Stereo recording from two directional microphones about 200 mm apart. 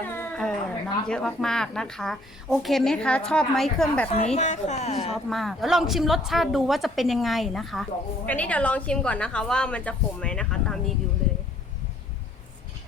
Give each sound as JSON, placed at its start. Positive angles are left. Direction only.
{"t": 0.0, "sound": "a sound", "side_deg": 10}
{"t": 1.0, "sound": "a woman's voice", "side_deg": 5}
{"t": 4.1, "sound": "a woman's voice", "side_deg": 30}
{"t": 5.1, "sound": "a woman's voice", "side_deg": 0}